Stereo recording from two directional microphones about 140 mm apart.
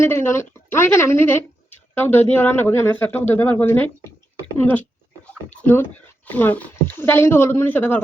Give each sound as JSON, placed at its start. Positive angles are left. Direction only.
{"t": 0.0, "sound": "speech", "side_deg": 15}
{"t": 4.5, "sound": "dog", "side_deg": 15}
{"t": 5.6, "sound": "speech", "side_deg": 15}